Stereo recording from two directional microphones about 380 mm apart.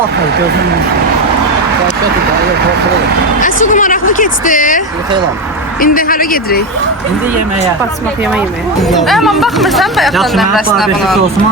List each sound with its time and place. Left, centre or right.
3.4 s speech: centre
5.8 s speech: left
8.3 s speech: centre